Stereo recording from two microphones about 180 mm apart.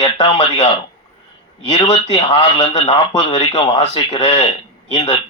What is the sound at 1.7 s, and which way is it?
A man's voice, 30° left (ahead or behind).